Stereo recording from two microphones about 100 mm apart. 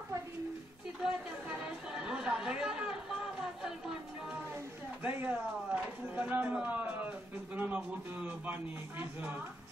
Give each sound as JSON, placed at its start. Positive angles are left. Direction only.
{"t": 1.5, "sound": "chatter", "side_deg": -10}
{"t": 5.0, "sound": "speech", "side_deg": -15}